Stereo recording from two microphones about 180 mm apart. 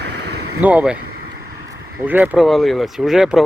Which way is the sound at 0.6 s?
10° right (ahead or behind).